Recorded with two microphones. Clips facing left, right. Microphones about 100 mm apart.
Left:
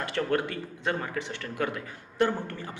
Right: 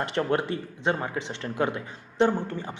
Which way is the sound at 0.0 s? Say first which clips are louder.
Right 2 dB; 25° right (ahead or behind).